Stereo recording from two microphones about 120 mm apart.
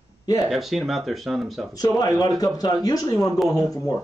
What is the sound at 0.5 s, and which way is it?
Speech, centre (ahead or behind).